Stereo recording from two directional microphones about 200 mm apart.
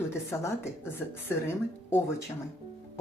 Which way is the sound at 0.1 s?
15° left (ahead or behind).